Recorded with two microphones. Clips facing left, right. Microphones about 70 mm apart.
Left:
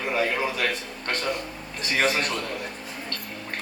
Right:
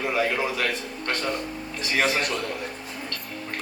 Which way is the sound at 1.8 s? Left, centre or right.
Left.